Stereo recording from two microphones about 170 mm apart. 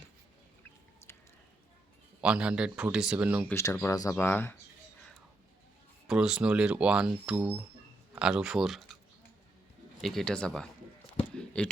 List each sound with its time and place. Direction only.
1.1 s a sound: 15° left (ahead or behind)
2.2 s speech: 5° right (ahead or behind)
3.5 s speech: 15° left (ahead or behind)
6.1 s speech: 5° right (ahead or behind)
10.0 s speech: centre (ahead or behind)
11.2 s a sound: 5° left (ahead or behind)